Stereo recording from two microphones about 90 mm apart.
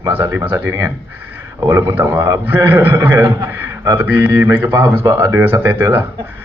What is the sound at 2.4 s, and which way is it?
A man's voice, 25° right (ahead or behind).